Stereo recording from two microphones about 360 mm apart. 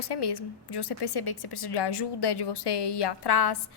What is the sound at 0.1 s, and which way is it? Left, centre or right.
A woman's voice, left.